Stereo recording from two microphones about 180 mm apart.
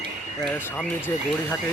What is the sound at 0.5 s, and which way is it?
Speech, 10° left (ahead or behind).